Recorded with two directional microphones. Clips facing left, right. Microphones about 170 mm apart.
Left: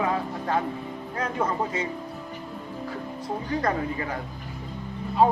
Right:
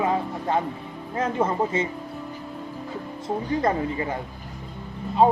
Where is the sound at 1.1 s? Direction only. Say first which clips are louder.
Right 4 dB; 25° right (ahead or behind).